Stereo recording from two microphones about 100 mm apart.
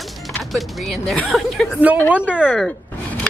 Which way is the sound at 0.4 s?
Centre (ahead or behind).